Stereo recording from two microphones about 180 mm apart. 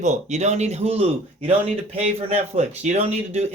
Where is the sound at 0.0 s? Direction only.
40° right (ahead or behind).